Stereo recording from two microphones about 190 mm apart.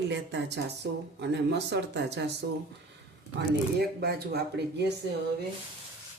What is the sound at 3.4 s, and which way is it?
Speech, 60° right (ahead or behind).